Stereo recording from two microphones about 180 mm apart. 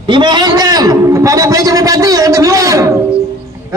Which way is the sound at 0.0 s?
25° right (ahead or behind).